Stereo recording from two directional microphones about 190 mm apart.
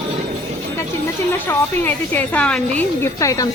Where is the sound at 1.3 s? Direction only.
10° left (ahead or behind).